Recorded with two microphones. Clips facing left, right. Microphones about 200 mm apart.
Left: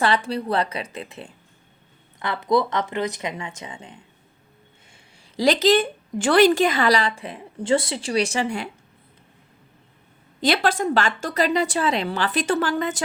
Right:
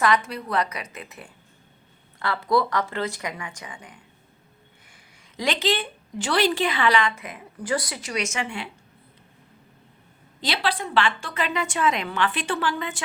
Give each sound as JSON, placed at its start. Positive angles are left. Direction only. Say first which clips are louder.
{"t": 0.0, "sound": "speech", "louder": "left 1 dB", "side_deg": 30}
{"t": 5.4, "sound": "a woman's voice", "louder": "left 8 dB", "side_deg": 40}
{"t": 10.4, "sound": "a woman's voice", "louder": "left 6 dB", "side_deg": 50}